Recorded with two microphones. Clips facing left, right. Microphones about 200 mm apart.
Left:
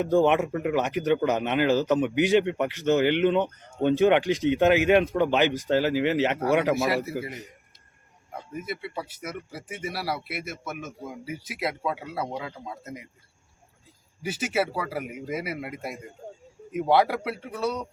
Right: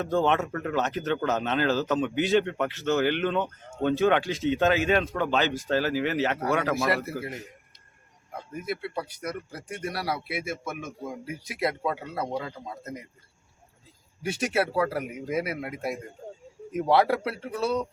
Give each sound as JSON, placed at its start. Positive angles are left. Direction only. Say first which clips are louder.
{"t": 0.0, "sound": "speech", "louder": "left 4 dB", "side_deg": 15}
{"t": 6.7, "sound": "speech", "louder": "left 1 dB", "side_deg": 0}
{"t": 8.5, "sound": "speech", "louder": "right 2 dB", "side_deg": 0}
{"t": 14.2, "sound": "speech", "louder": "even", "side_deg": 0}